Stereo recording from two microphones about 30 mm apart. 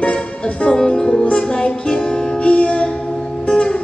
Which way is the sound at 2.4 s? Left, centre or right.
Left.